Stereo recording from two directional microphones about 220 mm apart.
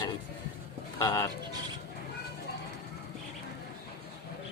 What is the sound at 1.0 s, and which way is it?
Speech, 15° left (ahead or behind).